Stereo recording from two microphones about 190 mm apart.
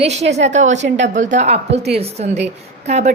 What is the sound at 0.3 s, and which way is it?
Speech, 35° right (ahead or behind).